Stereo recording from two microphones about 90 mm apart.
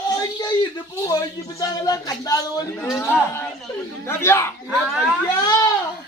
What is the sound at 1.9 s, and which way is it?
Speech, 45° left (ahead or behind).